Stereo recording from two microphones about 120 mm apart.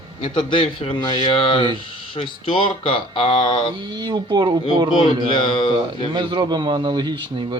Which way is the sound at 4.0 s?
40° right (ahead or behind).